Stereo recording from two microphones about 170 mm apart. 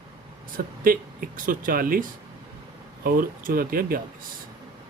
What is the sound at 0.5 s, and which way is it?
Speech, 55° right (ahead or behind).